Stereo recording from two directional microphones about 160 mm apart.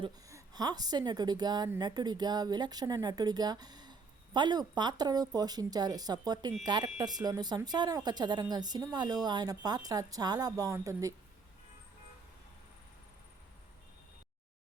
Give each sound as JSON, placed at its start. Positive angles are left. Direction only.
{"t": 0.3, "sound": "a woman's voice", "side_deg": -20}